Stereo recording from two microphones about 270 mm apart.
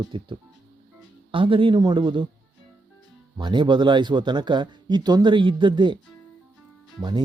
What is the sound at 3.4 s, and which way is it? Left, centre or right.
Speech, centre.